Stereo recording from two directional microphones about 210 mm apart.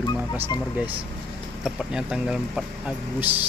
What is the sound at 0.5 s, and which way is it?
Speech, 20° left (ahead or behind).